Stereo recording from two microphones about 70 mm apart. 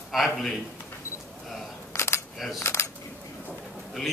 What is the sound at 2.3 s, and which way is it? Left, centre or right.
Speech, centre.